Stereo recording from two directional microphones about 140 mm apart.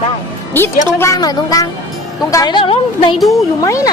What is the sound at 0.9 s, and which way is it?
A woman's voice, 20° left (ahead or behind).